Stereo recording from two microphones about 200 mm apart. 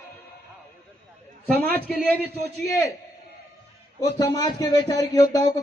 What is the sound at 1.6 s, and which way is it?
Speech, 10° left (ahead or behind).